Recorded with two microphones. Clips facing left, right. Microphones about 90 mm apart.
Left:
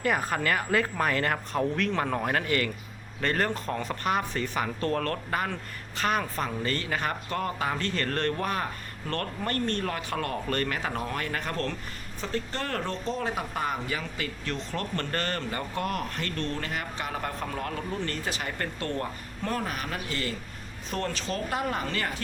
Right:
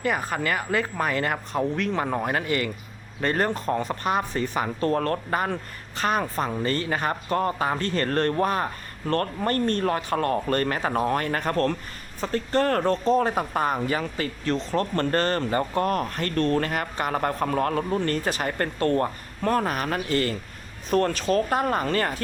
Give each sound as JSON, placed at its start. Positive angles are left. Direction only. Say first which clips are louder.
{"t": 0.0, "sound": "a woman's voice", "louder": "right 1 dB", "side_deg": 0}